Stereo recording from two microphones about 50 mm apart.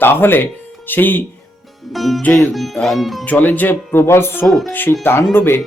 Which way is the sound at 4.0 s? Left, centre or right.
Left.